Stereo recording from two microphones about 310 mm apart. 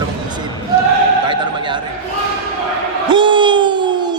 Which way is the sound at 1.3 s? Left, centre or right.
Centre.